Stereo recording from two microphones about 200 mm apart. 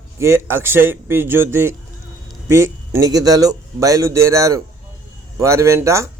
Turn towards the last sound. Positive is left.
turn(degrees=-15)  # may be behind; listen again after turning